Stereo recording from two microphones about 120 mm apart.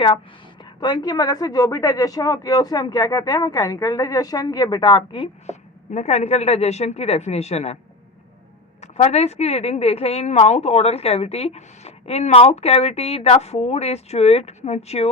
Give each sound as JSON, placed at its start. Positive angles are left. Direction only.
{"t": 0.6, "sound": "a woman's voice", "side_deg": 40}
{"t": 5.5, "sound": "a woman's voice", "side_deg": 70}
{"t": 8.8, "sound": "a woman's voice", "side_deg": 65}